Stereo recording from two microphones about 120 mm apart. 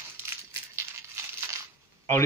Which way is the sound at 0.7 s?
20° right (ahead or behind).